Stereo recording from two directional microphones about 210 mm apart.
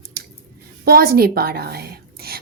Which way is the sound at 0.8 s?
45° right (ahead or behind).